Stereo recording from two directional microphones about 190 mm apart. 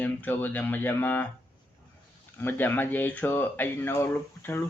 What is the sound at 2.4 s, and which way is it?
Speech, 10° left (ahead or behind).